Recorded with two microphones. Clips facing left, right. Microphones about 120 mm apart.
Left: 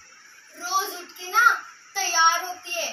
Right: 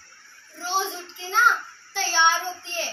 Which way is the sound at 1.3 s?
5° left (ahead or behind).